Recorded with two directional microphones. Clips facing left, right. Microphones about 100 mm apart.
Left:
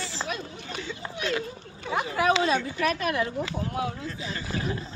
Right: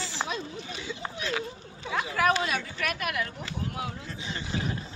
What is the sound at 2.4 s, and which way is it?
Speech, 30° left (ahead or behind).